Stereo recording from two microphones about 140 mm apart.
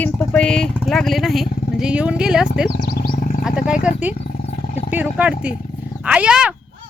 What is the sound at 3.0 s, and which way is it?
Wild animals, 90° left.